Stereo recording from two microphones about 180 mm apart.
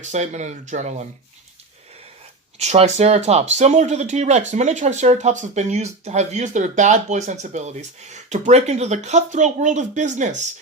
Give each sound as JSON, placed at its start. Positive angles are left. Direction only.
{"t": 0.0, "sound": "speech", "side_deg": -40}
{"t": 2.6, "sound": "speech", "side_deg": -35}